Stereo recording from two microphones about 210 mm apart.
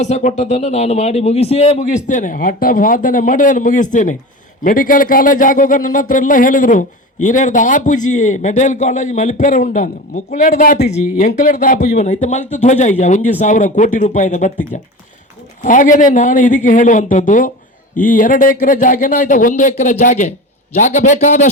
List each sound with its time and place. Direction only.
0.0 s speech: 35° left (ahead or behind)